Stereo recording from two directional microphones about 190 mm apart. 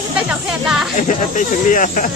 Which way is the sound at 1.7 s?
45° left (ahead or behind).